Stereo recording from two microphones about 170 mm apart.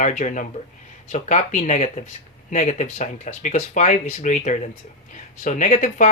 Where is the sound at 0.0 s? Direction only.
45° left (ahead or behind).